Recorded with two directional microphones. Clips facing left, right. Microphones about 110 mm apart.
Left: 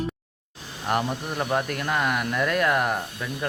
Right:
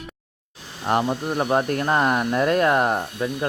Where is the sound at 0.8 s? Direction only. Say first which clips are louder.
Right 4 dB; 25° right (ahead or behind).